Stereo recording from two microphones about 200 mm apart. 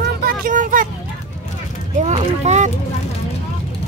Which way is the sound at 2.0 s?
35° right (ahead or behind).